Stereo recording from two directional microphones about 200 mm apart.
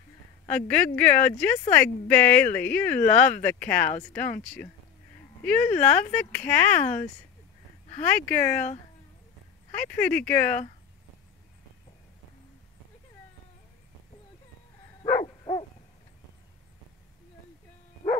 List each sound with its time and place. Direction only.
0.5 s speech: 5° left (ahead or behind)
9.8 s speech: 5° left (ahead or behind)
15.2 s dog: 25° left (ahead or behind)